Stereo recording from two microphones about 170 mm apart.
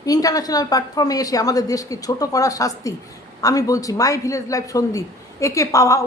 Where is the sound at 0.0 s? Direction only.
20° left (ahead or behind).